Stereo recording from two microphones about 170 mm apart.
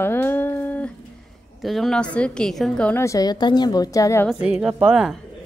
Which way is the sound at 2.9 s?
15° left (ahead or behind).